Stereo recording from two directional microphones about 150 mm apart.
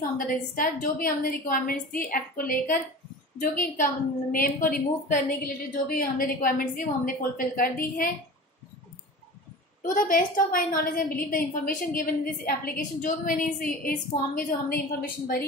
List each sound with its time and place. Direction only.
0.3 s a woman's voice: 70° left (ahead or behind)
9.8 s a woman's voice: 65° left (ahead or behind); by 15.4 s 85° left